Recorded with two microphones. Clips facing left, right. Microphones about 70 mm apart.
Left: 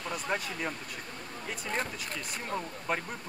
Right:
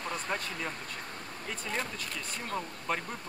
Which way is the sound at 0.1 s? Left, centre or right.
Centre.